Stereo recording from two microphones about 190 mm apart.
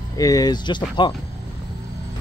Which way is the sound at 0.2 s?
20° left (ahead or behind).